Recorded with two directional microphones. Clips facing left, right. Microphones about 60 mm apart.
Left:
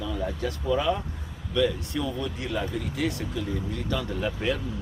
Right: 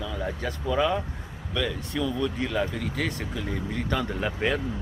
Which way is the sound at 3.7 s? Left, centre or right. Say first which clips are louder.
Right 2 dB; right.